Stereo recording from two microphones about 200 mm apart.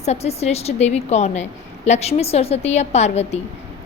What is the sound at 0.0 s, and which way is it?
A woman's voice, 30° left (ahead or behind).